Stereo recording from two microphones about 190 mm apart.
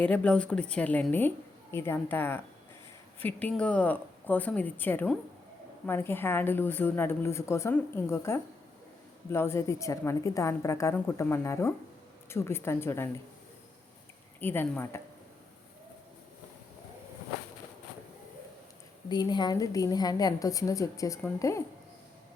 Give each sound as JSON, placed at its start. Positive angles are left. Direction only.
{"t": 0.0, "sound": "a woman's voice", "side_deg": 5}
{"t": 14.4, "sound": "a woman's voice", "side_deg": 10}
{"t": 19.0, "sound": "a woman's voice", "side_deg": 20}